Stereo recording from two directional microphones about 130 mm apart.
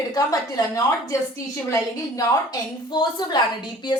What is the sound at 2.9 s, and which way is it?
Speech, 35° left (ahead or behind).